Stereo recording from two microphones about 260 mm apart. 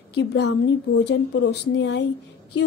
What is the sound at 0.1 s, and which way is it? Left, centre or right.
A woman's voice, left.